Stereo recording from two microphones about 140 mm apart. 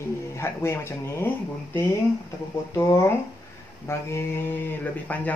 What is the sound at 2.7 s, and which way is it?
Speech, 20° left (ahead or behind).